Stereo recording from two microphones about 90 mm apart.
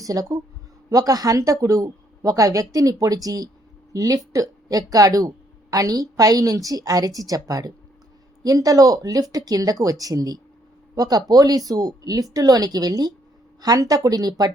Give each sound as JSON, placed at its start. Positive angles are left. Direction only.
{"t": 0.0, "sound": "a woman's voice", "side_deg": -40}